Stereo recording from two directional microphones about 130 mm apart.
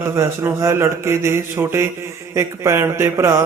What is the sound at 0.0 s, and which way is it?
A man's voice, 20° right (ahead or behind).